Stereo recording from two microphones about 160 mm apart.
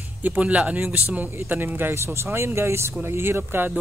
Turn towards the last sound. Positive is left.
turn(degrees=-15)  # may be behind; listen again after turning